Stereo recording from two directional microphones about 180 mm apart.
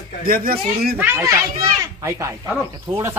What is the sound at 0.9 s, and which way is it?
Speech, 10° right (ahead or behind).